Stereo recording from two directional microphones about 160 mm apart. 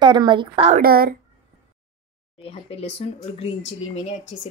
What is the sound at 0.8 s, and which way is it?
Speech, 70° right (ahead or behind).